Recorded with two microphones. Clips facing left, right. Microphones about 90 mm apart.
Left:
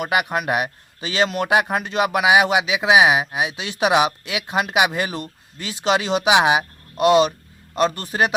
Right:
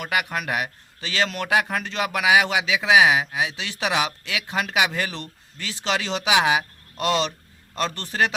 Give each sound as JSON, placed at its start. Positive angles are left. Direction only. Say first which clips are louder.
{"t": 0.0, "sound": "a man's voice", "louder": "left 5 dB", "side_deg": 20}